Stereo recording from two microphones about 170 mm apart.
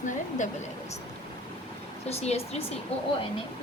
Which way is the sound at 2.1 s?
35° left (ahead or behind).